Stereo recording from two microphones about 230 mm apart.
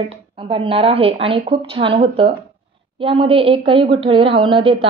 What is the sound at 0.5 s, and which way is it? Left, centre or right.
A woman's voice, right.